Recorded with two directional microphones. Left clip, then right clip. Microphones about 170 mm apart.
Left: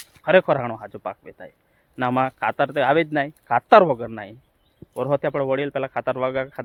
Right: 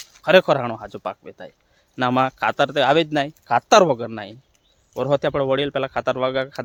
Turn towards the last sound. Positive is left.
turn(degrees=-30)  # may be behind; listen again after turning